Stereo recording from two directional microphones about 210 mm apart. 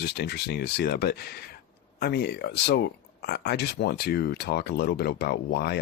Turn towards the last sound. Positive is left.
turn(degrees=50)  # may be behind; listen again after turning